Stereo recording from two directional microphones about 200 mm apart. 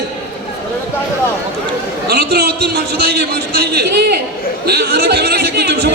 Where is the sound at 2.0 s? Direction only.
55° right (ahead or behind).